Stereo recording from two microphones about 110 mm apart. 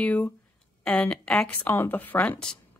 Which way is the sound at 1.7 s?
20° left (ahead or behind).